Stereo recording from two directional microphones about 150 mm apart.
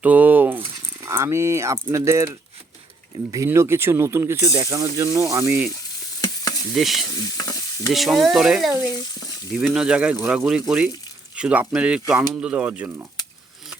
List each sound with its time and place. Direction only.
0.0 s speech: 10° right (ahead or behind)
3.3 s speech: 20° right (ahead or behind)
6.2 s stir: 25° left (ahead or behind)
6.7 s speech: centre (ahead or behind)
7.1 s stir: 25° left (ahead or behind)
7.9 s speech: centre (ahead or behind)
8.9 s frying: 25° left (ahead or behind)
9.5 s speech: 5° right (ahead or behind)